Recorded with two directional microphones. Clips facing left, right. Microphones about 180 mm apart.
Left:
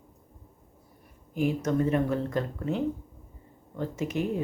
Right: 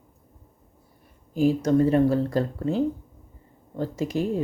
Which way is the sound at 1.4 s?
30° right (ahead or behind).